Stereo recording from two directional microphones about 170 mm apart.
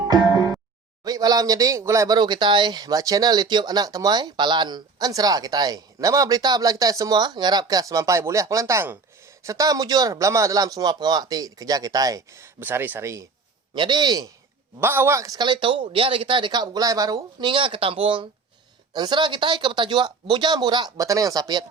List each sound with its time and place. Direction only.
0.1 s music: 20° right (ahead or behind)
1.0 s speech: 20° right (ahead or behind)
13.7 s speech: 25° right (ahead or behind)
14.8 s speech: 10° right (ahead or behind)